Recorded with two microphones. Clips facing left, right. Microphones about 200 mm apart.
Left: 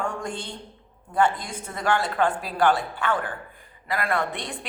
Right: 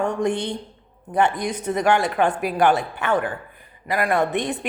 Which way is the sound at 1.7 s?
20° right (ahead or behind).